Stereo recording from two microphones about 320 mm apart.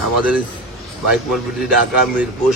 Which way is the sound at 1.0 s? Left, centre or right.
Centre.